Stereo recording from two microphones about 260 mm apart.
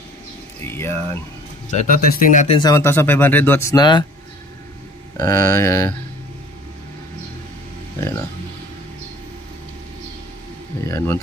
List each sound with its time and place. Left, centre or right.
0.7 s speech: centre
1.7 s speech: left
5.2 s speech: centre
10.9 s speech: centre